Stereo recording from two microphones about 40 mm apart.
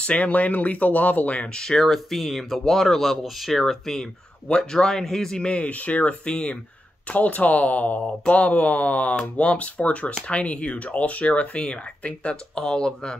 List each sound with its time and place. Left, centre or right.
0.0 s speech: left
1.6 s speech: centre
4.5 s speech: left
4.8 s a man's voice: centre
5.5 s speech: left
6.2 s speech: left
7.1 s speech: left; by 13.2 s centre